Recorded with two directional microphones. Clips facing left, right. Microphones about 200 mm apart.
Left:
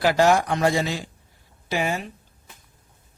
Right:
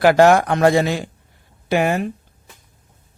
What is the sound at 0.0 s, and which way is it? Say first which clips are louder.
Speech: right 6 dB; 60° right (ahead or behind).